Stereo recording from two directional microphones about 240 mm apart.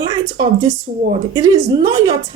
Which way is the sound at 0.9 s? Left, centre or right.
Right.